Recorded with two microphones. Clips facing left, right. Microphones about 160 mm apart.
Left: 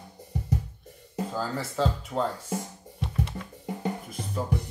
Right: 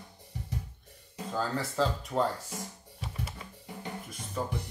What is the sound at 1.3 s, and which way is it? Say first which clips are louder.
Speech: right 2 dB; centre (ahead or behind).